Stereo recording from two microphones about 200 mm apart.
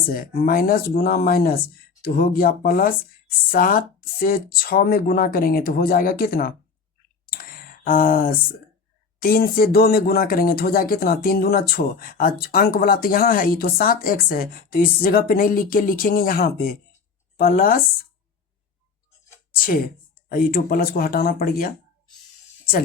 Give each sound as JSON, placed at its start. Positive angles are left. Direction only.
{"t": 0.1, "sound": "speech", "side_deg": 45}
{"t": 7.3, "sound": "a sound", "side_deg": 45}
{"t": 9.2, "sound": "speech", "side_deg": 45}
{"t": 19.5, "sound": "speech", "side_deg": 45}